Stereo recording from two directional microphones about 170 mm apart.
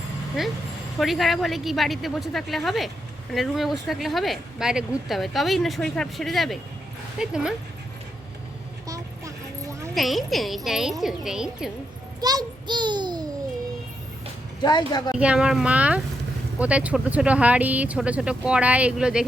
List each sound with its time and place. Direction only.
0.9 s a woman's voice: centre (ahead or behind)
9.9 s a woman's voice: centre (ahead or behind)
12.2 s a sound: 25° right (ahead or behind)
14.6 s a woman's voice: 25° left (ahead or behind)
15.1 s speech: 5° right (ahead or behind)